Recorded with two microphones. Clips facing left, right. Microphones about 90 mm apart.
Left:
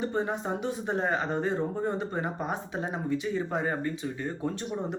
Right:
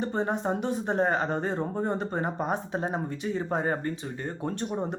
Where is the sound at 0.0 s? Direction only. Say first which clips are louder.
Right 2 dB; 40° right (ahead or behind).